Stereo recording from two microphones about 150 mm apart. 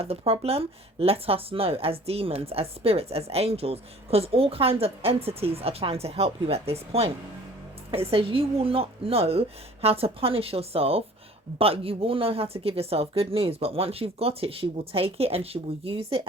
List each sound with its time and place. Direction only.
0.0 s speech: 40° right (ahead or behind)